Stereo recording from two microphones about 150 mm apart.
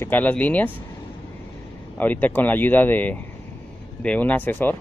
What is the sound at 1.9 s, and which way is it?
Speech, 10° left (ahead or behind).